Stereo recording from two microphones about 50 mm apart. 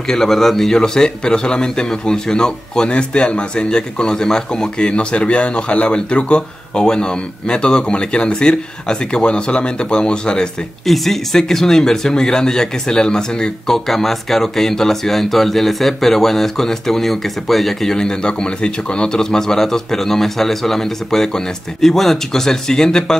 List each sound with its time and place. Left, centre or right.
0.1 s a man's voice: centre
10.9 s a man's voice: centre
17.9 s a man's voice: centre